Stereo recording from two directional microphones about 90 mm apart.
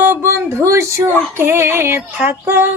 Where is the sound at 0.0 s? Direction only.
25° right (ahead or behind).